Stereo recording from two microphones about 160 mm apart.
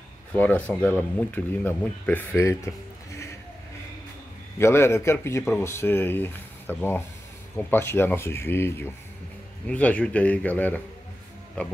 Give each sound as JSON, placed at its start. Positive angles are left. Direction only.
{"t": 0.3, "sound": "speech", "side_deg": 10}
{"t": 4.6, "sound": "speech", "side_deg": 15}